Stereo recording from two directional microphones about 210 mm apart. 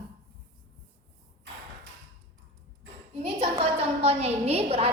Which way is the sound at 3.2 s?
25° right (ahead or behind).